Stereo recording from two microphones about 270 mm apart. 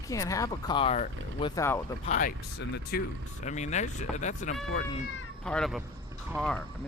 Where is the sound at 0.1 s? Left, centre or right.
Centre.